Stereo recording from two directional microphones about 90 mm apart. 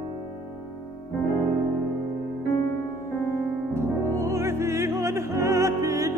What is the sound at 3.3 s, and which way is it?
Music, 30° right (ahead or behind).